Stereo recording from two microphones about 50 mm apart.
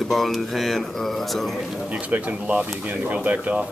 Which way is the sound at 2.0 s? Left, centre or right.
Right.